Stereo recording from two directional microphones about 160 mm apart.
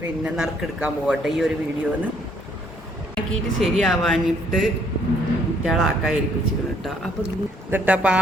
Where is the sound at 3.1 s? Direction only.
Centre (ahead or behind).